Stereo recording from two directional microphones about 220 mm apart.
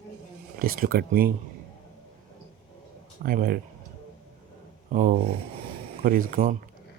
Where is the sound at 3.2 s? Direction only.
40° right (ahead or behind).